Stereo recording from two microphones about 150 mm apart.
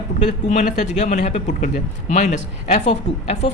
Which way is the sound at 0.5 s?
50° left (ahead or behind).